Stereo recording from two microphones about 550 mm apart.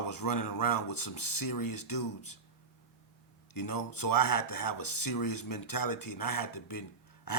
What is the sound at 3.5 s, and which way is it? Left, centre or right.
Speech, left.